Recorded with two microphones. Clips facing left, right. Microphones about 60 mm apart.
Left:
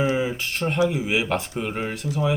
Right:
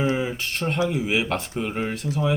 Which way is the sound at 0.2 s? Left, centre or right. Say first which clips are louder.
Left 2 dB; centre.